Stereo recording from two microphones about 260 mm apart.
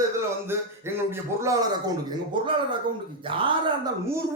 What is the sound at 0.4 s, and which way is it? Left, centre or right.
A man's voice, centre.